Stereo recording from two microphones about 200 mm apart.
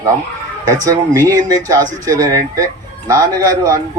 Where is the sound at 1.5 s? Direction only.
15° right (ahead or behind).